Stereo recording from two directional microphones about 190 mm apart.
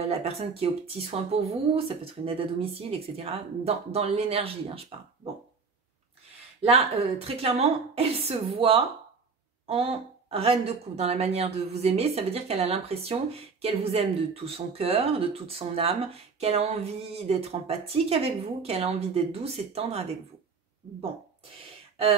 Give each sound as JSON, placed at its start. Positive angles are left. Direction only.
{"t": 0.1, "sound": "a woman's voice", "side_deg": -35}
{"t": 6.6, "sound": "a woman's voice", "side_deg": -35}